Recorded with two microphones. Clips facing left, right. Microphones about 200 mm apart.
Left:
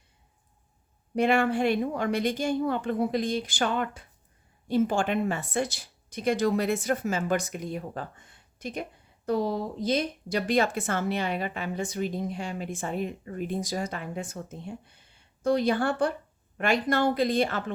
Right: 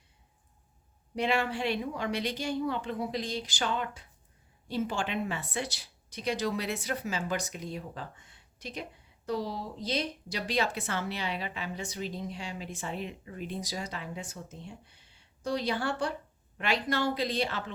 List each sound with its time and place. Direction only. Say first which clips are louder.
1.1 s a woman's voice: left 6 dB; 50° left (ahead or behind)